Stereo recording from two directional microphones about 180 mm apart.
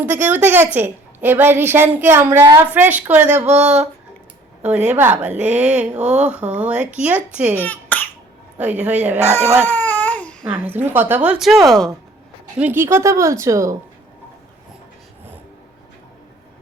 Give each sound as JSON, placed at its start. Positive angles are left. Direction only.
{"t": 0.0, "sound": "a woman's voice", "side_deg": -10}
{"t": 4.9, "sound": "a woman's voice", "side_deg": -10}
{"t": 7.5, "sound": "cough", "side_deg": 10}
{"t": 8.5, "sound": "a woman's voice", "side_deg": -10}
{"t": 9.3, "sound": "baby cry", "side_deg": 10}
{"t": 10.5, "sound": "a woman's voice", "side_deg": -10}
{"t": 12.5, "sound": "a woman's voice", "side_deg": -10}